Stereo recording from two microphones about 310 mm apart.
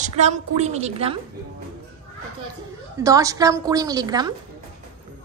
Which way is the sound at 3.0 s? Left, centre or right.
Centre.